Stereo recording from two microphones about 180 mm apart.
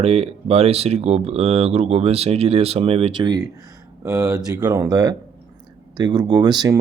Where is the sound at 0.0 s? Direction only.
35° right (ahead or behind).